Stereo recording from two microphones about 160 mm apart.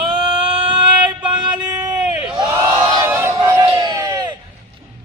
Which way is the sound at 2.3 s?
20° right (ahead or behind).